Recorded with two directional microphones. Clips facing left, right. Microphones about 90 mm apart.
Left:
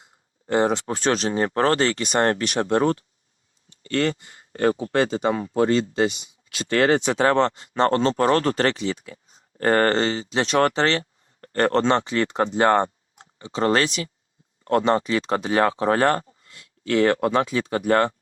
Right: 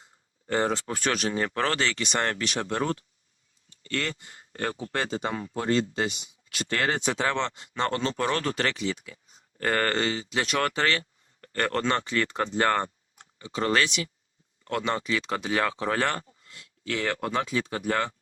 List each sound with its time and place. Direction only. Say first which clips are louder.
0.0 s speech: left 4 dB; 20° left (ahead or behind); by 4.9 s 35° left (ahead or behind)
5.3 s speech: left 8 dB; 45° left (ahead or behind)
6.7 s speech: left 8 dB; 70° left (ahead or behind)
7.2 s speech: left 9 dB; 40° left (ahead or behind)